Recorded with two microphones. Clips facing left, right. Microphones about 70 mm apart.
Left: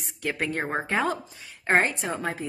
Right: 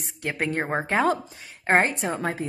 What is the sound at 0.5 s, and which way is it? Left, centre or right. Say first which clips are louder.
Speech: right 2 dB; centre.